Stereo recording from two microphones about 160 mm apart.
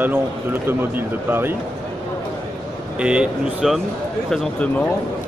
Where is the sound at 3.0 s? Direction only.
5° right (ahead or behind).